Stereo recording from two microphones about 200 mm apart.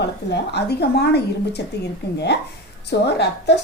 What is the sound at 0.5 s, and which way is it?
A woman's voice, 55° left (ahead or behind).